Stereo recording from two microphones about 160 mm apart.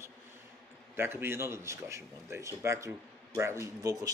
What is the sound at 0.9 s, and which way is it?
A man's voice, 15° right (ahead or behind).